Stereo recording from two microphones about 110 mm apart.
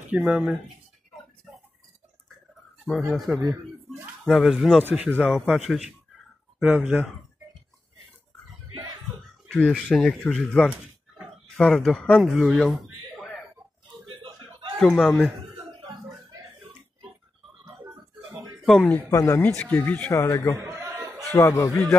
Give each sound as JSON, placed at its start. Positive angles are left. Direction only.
{"t": 0.1, "sound": "speech", "side_deg": -10}
{"t": 2.8, "sound": "speech", "side_deg": 0}
{"t": 4.3, "sound": "speech", "side_deg": 0}
{"t": 9.5, "sound": "speech", "side_deg": 5}
{"t": 12.8, "sound": "a sound", "side_deg": 0}
{"t": 14.8, "sound": "speech", "side_deg": 5}
{"t": 18.3, "sound": "a sound", "side_deg": -35}
{"t": 18.7, "sound": "speech", "side_deg": 15}
{"t": 19.0, "sound": "a man's voice", "side_deg": 30}
{"t": 19.4, "sound": "speech", "side_deg": 15}
{"t": 20.1, "sound": "a man's voice", "side_deg": 30}
{"t": 20.7, "sound": "a sound", "side_deg": -30}
{"t": 21.4, "sound": "speech", "side_deg": 30}